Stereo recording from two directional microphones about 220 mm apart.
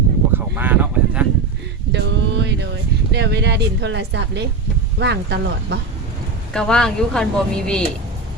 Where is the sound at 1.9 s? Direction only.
50° right (ahead or behind).